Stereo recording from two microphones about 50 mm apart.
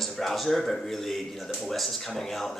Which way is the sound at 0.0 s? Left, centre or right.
Centre.